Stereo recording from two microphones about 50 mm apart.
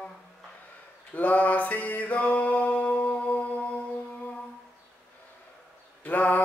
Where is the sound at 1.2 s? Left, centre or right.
Left.